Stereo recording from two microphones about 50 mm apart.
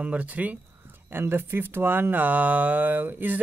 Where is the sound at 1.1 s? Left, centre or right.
Right.